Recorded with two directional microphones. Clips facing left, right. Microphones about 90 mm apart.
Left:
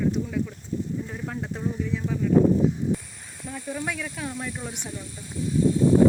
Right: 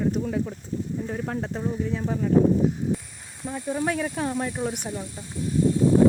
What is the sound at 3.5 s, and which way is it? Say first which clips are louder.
Speech: right 5 dB; 30° right (ahead or behind).